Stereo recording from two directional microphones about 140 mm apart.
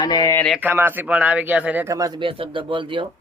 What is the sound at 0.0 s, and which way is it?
Speech, 30° left (ahead or behind).